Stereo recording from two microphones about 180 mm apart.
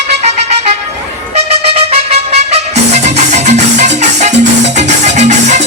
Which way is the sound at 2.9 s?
40° right (ahead or behind).